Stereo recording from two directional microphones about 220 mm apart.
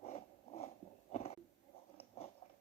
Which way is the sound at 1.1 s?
30° left (ahead or behind).